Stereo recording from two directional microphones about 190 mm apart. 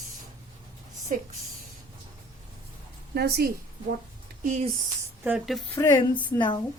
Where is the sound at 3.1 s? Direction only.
55° right (ahead or behind).